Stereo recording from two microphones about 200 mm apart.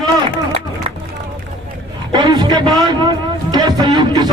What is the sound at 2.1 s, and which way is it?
A man's voice, 20° right (ahead or behind).